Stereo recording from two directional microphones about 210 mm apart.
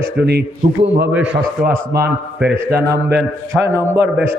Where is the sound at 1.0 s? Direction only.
10° right (ahead or behind).